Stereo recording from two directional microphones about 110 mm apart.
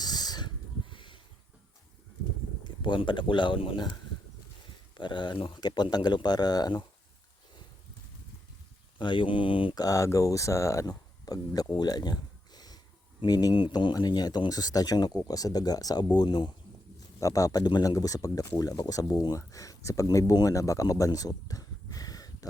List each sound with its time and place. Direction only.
0.0 s a sound: 40° left (ahead or behind)
2.8 s speech: 45° left (ahead or behind)
4.9 s speech: 45° left (ahead or behind)
9.0 s speech: 45° left (ahead or behind)
9.7 s speech: 30° left (ahead or behind)